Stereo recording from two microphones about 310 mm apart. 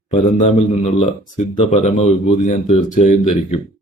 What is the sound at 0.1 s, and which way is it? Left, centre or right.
Speech, left.